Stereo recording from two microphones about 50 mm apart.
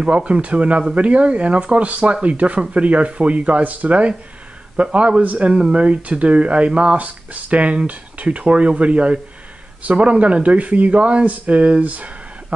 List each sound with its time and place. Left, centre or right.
0.0 s speech: right